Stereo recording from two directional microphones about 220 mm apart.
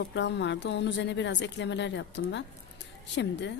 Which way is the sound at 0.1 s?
55° left (ahead or behind).